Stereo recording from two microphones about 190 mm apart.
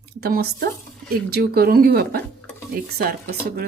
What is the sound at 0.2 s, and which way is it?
Speech, 55° right (ahead or behind).